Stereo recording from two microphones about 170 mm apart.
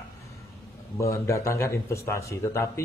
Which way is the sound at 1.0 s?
15° left (ahead or behind).